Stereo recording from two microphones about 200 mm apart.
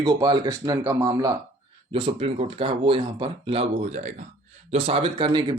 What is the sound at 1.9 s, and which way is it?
Speech, 30° right (ahead or behind).